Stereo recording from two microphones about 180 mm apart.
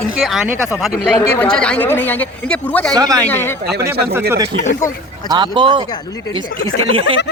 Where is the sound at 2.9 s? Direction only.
20° right (ahead or behind).